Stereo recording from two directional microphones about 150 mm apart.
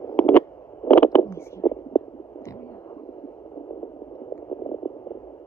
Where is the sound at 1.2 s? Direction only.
15° left (ahead or behind).